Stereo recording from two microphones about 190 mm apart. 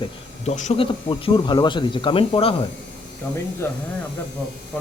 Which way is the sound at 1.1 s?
25° left (ahead or behind).